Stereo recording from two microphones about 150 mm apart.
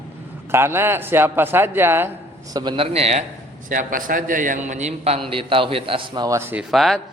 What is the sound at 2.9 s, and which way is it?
Speech, 45° right (ahead or behind).